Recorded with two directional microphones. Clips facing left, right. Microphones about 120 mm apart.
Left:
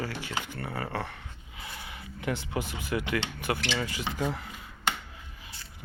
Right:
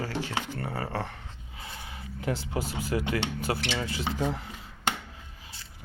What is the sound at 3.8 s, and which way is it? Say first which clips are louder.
Speech: right 2 dB; 35° right (ahead or behind).